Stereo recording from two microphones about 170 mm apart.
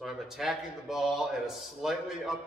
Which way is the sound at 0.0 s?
Centre (ahead or behind).